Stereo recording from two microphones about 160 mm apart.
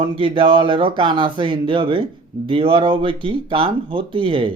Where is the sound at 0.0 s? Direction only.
30° right (ahead or behind).